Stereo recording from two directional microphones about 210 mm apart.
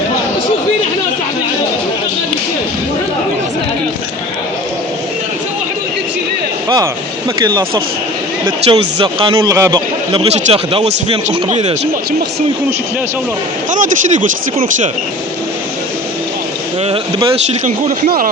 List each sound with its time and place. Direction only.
6.7 s a sound: 20° right (ahead or behind)
7.4 s speech: 20° right (ahead or behind)
10.1 s speech: 25° right (ahead or behind)
13.7 s speech: 40° right (ahead or behind)
16.8 s a sound: 25° right (ahead or behind)
17.8 s speech: 40° right (ahead or behind)